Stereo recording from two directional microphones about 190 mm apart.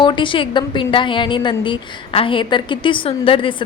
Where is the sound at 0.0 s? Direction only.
25° left (ahead or behind).